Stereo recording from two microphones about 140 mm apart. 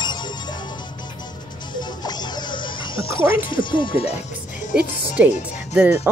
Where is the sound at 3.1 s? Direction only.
35° left (ahead or behind).